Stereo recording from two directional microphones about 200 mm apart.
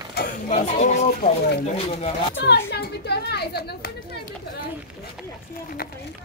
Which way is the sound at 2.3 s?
55° left (ahead or behind).